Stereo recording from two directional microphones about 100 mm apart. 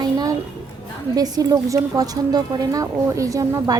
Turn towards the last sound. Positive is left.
turn(degrees=-30)  # may be behind; listen again after turning